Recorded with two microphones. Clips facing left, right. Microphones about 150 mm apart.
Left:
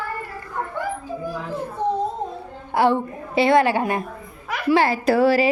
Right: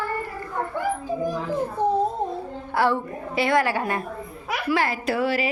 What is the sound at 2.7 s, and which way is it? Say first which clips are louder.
A woman's voice: left 4 dB; 20° left (ahead or behind).